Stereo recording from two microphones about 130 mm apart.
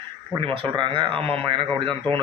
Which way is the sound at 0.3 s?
40° right (ahead or behind).